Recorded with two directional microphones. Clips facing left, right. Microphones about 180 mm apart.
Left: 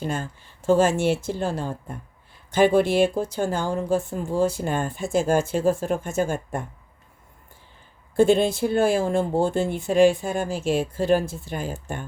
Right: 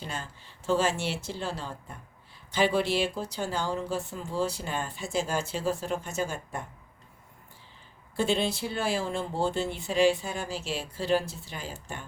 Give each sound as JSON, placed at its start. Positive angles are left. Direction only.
{"t": 0.0, "sound": "speech", "side_deg": 50}
{"t": 8.1, "sound": "speech", "side_deg": 50}